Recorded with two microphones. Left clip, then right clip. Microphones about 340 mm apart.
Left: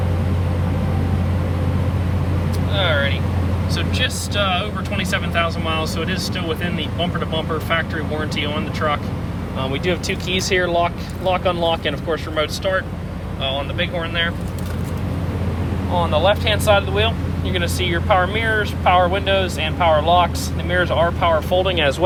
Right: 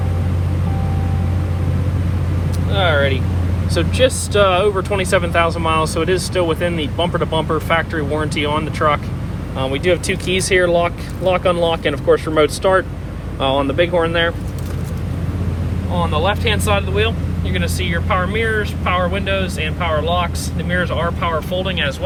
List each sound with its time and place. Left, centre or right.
2.7 s vehicle: centre
3.8 s speech: centre
9.8 s speech: right
16.0 s speech: centre